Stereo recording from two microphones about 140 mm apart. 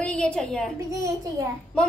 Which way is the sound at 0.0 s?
5° left (ahead or behind).